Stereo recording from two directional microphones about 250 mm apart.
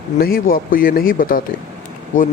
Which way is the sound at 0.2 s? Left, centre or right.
Left.